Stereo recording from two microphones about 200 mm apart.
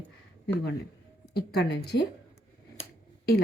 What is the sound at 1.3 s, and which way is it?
Speech, 50° left (ahead or behind).